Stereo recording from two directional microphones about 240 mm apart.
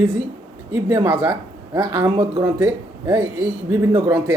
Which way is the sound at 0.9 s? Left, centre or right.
Centre.